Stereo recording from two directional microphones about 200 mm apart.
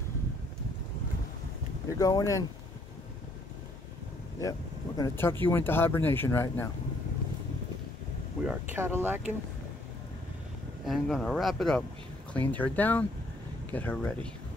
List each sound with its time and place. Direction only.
1.9 s speech: 15° left (ahead or behind)
4.4 s speech: 20° left (ahead or behind)
8.5 s speech: 10° right (ahead or behind)
10.9 s speech: centre (ahead or behind)